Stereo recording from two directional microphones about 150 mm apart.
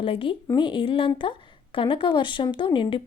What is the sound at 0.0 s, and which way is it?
Speech, 35° left (ahead or behind).